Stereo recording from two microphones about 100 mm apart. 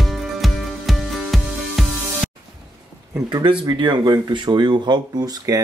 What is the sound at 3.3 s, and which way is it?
Speech, 50° right (ahead or behind).